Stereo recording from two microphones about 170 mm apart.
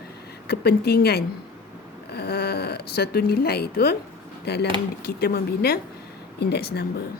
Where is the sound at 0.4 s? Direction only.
70° left (ahead or behind).